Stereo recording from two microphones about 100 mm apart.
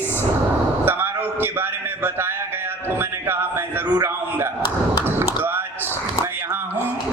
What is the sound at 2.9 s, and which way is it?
Music, 20° right (ahead or behind).